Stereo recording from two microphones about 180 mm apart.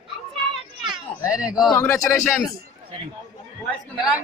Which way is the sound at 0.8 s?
5° right (ahead or behind).